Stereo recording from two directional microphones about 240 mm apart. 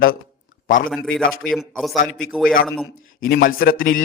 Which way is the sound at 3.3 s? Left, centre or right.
Left.